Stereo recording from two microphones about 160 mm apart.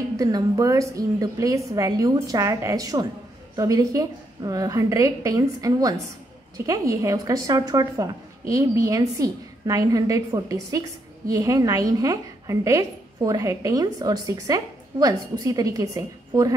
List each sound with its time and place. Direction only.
0.2 s a woman's voice: 20° right (ahead or behind)